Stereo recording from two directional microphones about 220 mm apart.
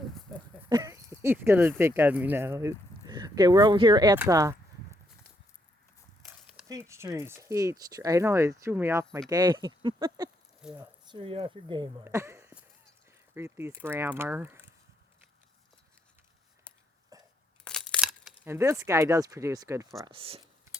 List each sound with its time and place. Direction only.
0.7 s speech: 15° right (ahead or behind)
6.7 s speech: 15° right (ahead or behind)
10.6 s speech: 5° right (ahead or behind)
11.1 s speech: 25° right (ahead or behind)
12.0 s speech: 10° right (ahead or behind)
17.1 s crunch: 15° right (ahead or behind)
17.7 s a sound: 5° left (ahead or behind)
18.4 s speech: 10° right (ahead or behind)